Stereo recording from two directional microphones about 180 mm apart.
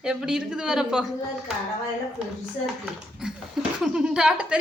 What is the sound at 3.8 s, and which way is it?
Speech, 5° right (ahead or behind).